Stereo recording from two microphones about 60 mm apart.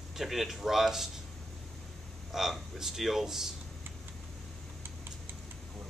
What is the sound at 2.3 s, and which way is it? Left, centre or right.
Speech, centre.